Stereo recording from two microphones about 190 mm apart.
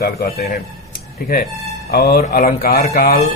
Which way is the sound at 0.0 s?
55° left (ahead or behind).